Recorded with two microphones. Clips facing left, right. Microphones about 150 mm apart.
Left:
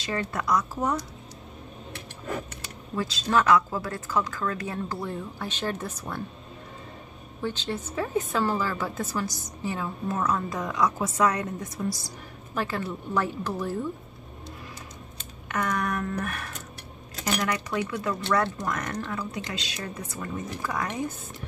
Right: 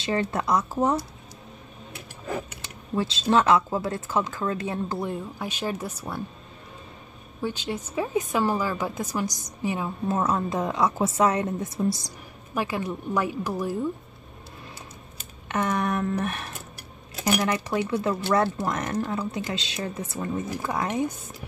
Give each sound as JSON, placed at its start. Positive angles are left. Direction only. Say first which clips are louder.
{"t": 0.0, "sound": "speech", "louder": "right 4 dB", "side_deg": -25}
{"t": 2.0, "sound": "a sound", "louder": "right 2 dB", "side_deg": -10}
{"t": 3.0, "sound": "speech", "louder": "right 3 dB", "side_deg": -25}
{"t": 7.4, "sound": "a woman's voice", "louder": "right 1 dB", "side_deg": -10}
{"t": 10.0, "sound": "speech", "louder": "right 3 dB", "side_deg": -25}
{"t": 12.5, "sound": "a woman's voice", "louder": "right 2 dB", "side_deg": -15}
{"t": 15.4, "sound": "speech", "louder": "right 3 dB", "side_deg": -25}
{"t": 17.1, "sound": "a sound", "louder": "right 5 dB", "side_deg": -10}
{"t": 17.4, "sound": "speech", "louder": "right 3 dB", "side_deg": -25}